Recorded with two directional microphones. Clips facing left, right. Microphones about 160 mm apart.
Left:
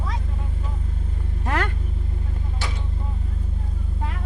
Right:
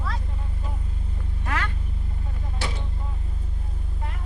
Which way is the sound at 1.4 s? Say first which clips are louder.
Left 5 dB; 35° left (ahead or behind).